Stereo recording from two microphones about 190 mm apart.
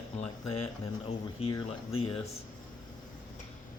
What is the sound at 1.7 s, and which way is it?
Speech, 30° left (ahead or behind).